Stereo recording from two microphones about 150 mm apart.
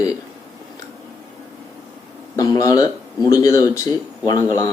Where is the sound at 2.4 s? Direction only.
25° left (ahead or behind).